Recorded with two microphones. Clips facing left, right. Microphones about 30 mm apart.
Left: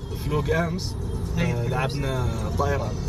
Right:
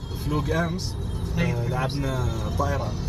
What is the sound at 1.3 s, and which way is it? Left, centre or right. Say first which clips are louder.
Speech: even; centre.